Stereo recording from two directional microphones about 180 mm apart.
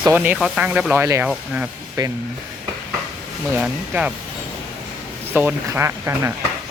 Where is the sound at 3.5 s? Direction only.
10° right (ahead or behind).